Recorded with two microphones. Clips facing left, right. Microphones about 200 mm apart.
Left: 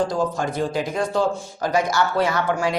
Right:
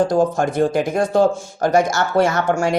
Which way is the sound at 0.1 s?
50° right (ahead or behind).